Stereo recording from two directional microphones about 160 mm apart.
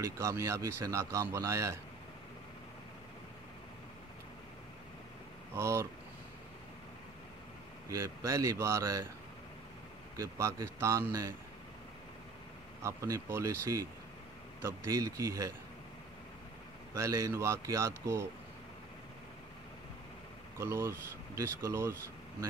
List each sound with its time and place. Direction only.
0.0 s a man's voice: 20° right (ahead or behind)
5.5 s speech: 15° right (ahead or behind)
7.9 s a man's voice: 20° right (ahead or behind)
10.1 s a man's voice: 20° right (ahead or behind)
12.8 s a man's voice: 20° right (ahead or behind)
16.9 s speech: 20° right (ahead or behind)
20.5 s speech: 15° right (ahead or behind)